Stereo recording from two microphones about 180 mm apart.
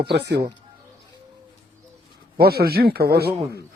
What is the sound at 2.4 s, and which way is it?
Speech, 60° right (ahead or behind).